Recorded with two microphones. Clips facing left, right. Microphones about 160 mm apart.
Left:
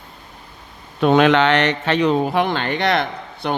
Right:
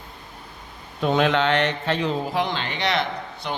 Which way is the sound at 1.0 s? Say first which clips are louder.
Left 6 dB; 70° left (ahead or behind).